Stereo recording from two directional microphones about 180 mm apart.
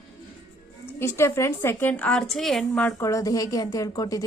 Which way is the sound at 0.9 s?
15° left (ahead or behind).